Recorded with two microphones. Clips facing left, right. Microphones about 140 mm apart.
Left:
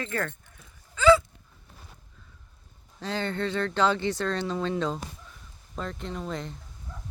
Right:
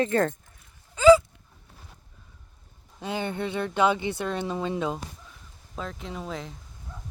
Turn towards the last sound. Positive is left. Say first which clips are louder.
# left 1 dB
turn(degrees=0)  # may be behind; listen again after turning